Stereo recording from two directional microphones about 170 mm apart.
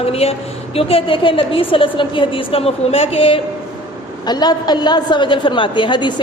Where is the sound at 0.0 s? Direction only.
35° left (ahead or behind).